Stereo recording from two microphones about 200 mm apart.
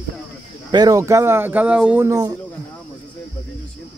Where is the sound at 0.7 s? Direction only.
20° right (ahead or behind).